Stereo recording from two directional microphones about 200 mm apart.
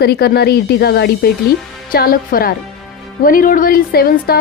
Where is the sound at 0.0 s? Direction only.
55° left (ahead or behind).